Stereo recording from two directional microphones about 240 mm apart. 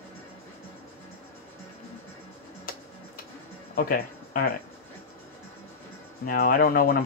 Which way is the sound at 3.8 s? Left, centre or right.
Left.